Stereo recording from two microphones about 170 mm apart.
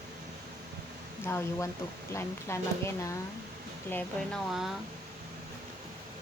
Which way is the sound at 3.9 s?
10° left (ahead or behind).